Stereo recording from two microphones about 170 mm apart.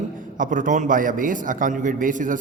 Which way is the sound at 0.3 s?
50° right (ahead or behind).